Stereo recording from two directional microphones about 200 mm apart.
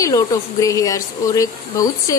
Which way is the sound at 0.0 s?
15° left (ahead or behind).